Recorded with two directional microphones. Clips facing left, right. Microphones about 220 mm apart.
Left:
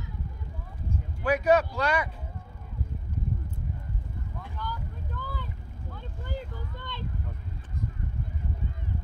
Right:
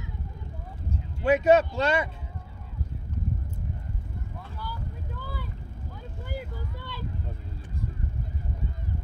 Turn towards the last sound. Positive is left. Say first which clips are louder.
# right 1 dB
turn(degrees=-10)  # may be behind; listen again after turning